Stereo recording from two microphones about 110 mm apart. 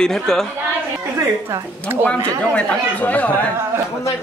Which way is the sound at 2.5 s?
15° left (ahead or behind).